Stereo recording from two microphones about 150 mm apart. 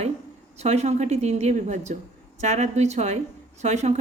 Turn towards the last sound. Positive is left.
turn(degrees=-50)  # may be behind; listen again after turning